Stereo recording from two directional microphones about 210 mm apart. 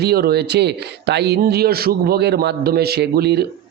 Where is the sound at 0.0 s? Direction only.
50° right (ahead or behind).